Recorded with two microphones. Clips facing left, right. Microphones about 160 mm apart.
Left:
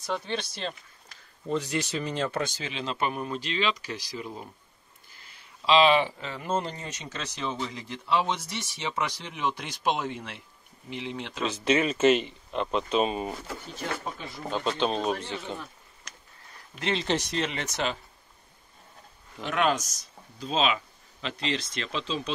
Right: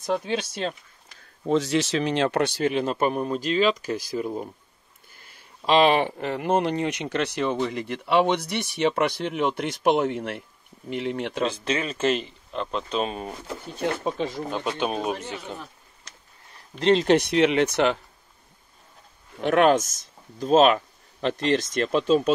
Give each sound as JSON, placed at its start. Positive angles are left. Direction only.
{"t": 1.4, "sound": "speech", "side_deg": -85}
{"t": 11.6, "sound": "speech", "side_deg": 5}
{"t": 13.7, "sound": "speech", "side_deg": -90}
{"t": 14.5, "sound": "speech", "side_deg": -10}
{"t": 16.8, "sound": "speech", "side_deg": -40}
{"t": 17.1, "sound": "speech", "side_deg": -60}
{"t": 19.4, "sound": "speech", "side_deg": -55}